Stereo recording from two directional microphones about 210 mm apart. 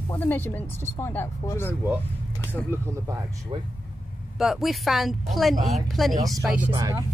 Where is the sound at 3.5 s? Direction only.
25° right (ahead or behind).